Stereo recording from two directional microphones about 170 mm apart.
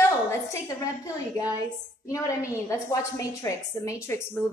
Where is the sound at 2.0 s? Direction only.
20° left (ahead or behind).